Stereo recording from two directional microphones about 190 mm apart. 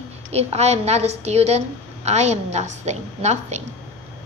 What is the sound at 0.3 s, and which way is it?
A woman's voice, 35° right (ahead or behind).